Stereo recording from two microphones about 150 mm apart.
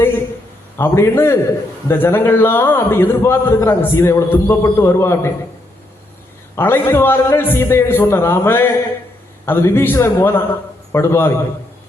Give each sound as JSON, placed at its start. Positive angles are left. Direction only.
{"t": 0.8, "sound": "a man's voice", "side_deg": 15}
{"t": 6.6, "sound": "a man's voice", "side_deg": 15}